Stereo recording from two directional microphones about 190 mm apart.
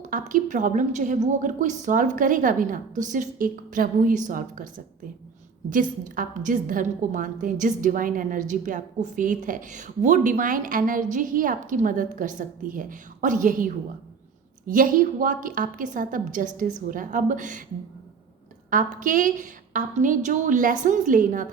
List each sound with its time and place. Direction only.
0.1 s a woman's voice: 45° right (ahead or behind)
6.1 s a woman's voice: 45° right (ahead or behind)
14.7 s a woman's voice: 45° right (ahead or behind)
18.7 s a woman's voice: 45° right (ahead or behind)